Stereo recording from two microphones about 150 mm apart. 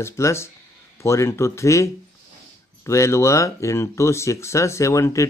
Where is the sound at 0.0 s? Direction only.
20° left (ahead or behind).